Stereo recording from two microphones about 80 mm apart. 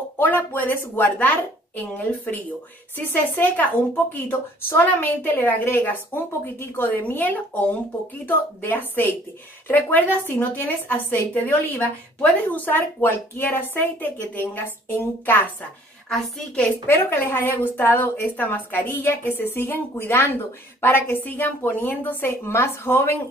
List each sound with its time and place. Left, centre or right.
0.2 s a woman's voice: left
16.1 s a woman's voice: centre
16.8 s a woman's voice: left